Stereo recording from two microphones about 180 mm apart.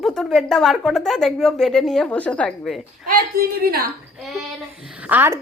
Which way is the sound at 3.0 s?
55° right (ahead or behind).